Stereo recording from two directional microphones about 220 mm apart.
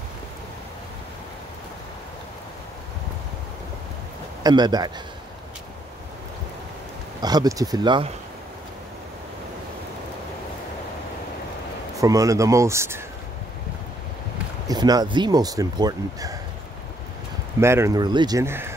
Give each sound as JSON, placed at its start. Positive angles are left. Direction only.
{"t": 4.4, "sound": "speech", "side_deg": -20}
{"t": 7.2, "sound": "speech", "side_deg": -15}
{"t": 12.0, "sound": "speech", "side_deg": -15}
{"t": 14.7, "sound": "speech", "side_deg": -15}
{"t": 17.6, "sound": "speech", "side_deg": -10}